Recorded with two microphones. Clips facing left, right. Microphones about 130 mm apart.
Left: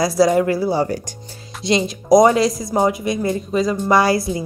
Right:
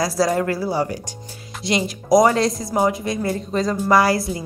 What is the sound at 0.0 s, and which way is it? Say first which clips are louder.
Speech: left 4 dB; 15° left (ahead or behind).